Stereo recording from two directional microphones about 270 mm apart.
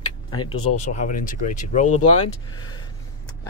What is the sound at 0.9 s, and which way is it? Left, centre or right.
Speech, left.